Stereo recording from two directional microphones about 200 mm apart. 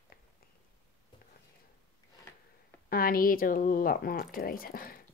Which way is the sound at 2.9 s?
45° left (ahead or behind).